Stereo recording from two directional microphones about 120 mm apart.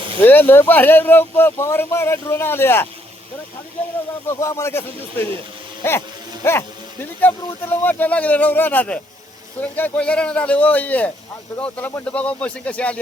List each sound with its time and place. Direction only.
0.2 s speech: 15° left (ahead or behind)
4.3 s speech: 25° left (ahead or behind)
6.4 s speech: 20° left (ahead or behind)